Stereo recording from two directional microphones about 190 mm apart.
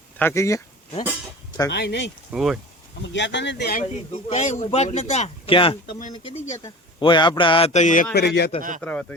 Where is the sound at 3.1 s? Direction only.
70° left (ahead or behind).